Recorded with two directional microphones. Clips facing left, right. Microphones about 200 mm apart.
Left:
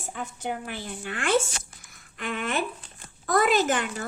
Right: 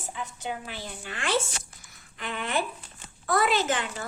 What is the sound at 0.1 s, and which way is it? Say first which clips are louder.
A woman's voice: left 2 dB; 50° left (ahead or behind).